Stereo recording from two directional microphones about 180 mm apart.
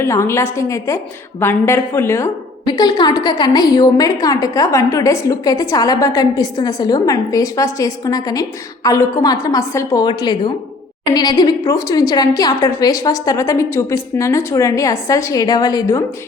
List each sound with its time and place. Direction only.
0.0 s a woman's voice: 15° left (ahead or behind)